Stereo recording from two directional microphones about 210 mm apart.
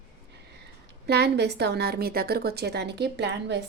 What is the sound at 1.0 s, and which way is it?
A woman's voice, 50° right (ahead or behind).